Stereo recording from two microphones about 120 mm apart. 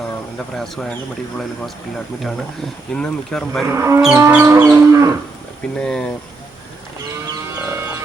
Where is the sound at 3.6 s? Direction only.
25° right (ahead or behind).